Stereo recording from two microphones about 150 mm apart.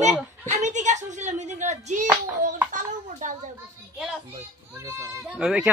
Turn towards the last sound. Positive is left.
turn(degrees=-5)  # may be behind; listen again after turning